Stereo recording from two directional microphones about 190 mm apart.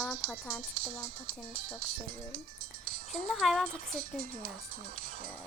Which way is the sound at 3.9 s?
50° right (ahead or behind).